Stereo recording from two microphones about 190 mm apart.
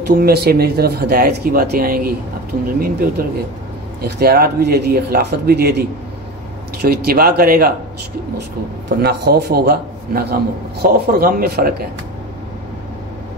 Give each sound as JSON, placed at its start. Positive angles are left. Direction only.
{"t": 0.1, "sound": "speech", "side_deg": -55}
{"t": 8.8, "sound": "speech", "side_deg": -60}